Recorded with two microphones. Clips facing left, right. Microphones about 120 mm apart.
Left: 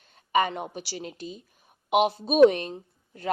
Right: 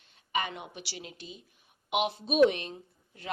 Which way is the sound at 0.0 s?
45° left (ahead or behind).